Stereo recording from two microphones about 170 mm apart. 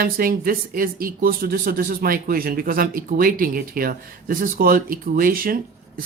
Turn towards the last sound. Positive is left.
turn(degrees=-55)  # may be behind; listen again after turning